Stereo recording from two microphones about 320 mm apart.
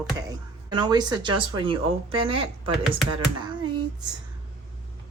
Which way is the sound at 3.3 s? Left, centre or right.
Centre.